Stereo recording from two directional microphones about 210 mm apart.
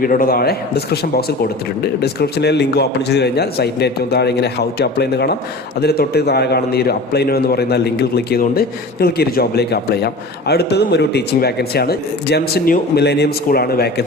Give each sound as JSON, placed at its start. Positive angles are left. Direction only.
{"t": 0.0, "sound": "a man's voice", "side_deg": 40}